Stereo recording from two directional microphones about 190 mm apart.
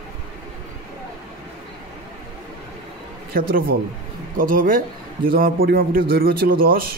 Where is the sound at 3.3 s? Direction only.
50° right (ahead or behind).